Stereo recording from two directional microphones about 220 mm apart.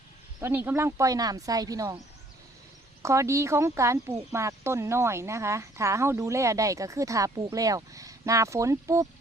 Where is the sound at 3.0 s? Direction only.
15° right (ahead or behind).